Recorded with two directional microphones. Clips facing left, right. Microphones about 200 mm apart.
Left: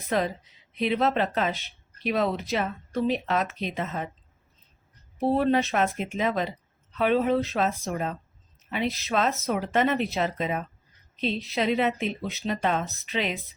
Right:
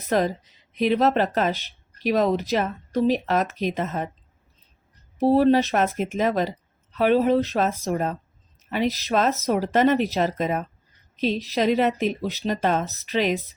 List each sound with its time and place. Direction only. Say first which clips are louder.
0.1 s speech: right 4 dB; 40° right (ahead or behind)
5.2 s speech: right 5 dB; 35° right (ahead or behind)